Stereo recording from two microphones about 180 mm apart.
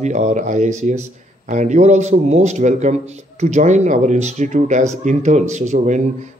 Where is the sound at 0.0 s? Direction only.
40° right (ahead or behind).